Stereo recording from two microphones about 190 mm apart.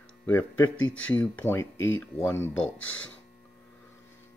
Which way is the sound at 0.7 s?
90° left.